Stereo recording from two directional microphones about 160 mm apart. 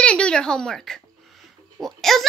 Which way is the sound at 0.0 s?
5° left (ahead or behind).